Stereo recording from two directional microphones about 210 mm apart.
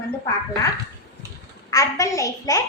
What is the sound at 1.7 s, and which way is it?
Speech, 15° left (ahead or behind).